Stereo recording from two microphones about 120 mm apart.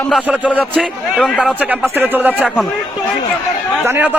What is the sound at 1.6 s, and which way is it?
Speech, 15° right (ahead or behind).